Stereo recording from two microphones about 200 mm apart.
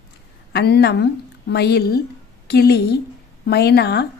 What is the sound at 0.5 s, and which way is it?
A woman's voice, 55° left (ahead or behind).